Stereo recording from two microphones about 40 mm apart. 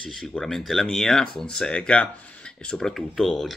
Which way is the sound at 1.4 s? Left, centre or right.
Left.